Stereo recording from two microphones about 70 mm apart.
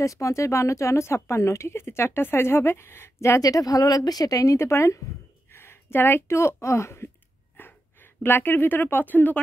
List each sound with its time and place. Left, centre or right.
0.0 s speech: left
3.4 s speech: left
4.6 s speech: left
7.5 s speech: left